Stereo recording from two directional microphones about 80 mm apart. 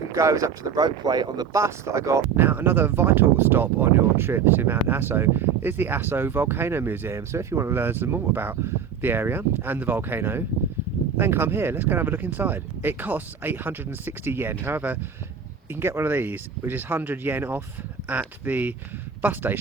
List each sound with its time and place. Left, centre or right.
0.1 s speech: right
1.5 s speech: right
2.4 s speech: right